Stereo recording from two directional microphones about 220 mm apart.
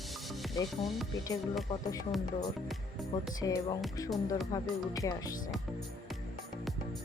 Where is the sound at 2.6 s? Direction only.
Centre (ahead or behind).